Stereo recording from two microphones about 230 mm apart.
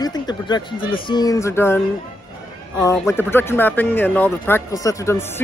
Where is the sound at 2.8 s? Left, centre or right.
Centre.